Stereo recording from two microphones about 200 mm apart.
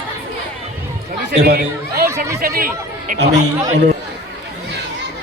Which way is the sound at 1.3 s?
55° right (ahead or behind).